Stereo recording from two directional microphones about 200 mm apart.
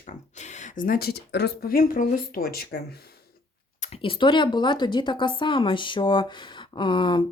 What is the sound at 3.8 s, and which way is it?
Speech, 30° left (ahead or behind).